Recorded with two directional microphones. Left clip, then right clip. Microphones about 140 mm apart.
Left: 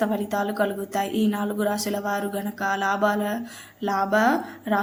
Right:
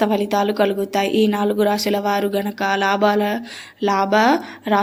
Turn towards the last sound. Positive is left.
turn(degrees=-25)  # may be behind; listen again after turning